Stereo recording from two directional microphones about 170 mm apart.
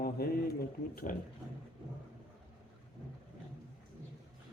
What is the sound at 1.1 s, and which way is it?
Speech, 50° left (ahead or behind).